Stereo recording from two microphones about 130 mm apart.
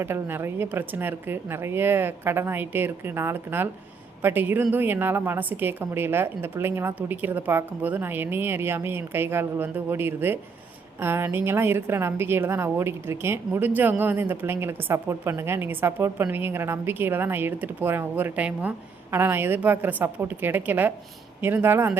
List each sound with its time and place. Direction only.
0.0 s a woman's voice: 15° right (ahead or behind)